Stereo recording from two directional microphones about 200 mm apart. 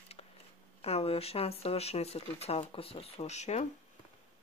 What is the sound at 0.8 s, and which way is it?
Speech, 30° left (ahead or behind).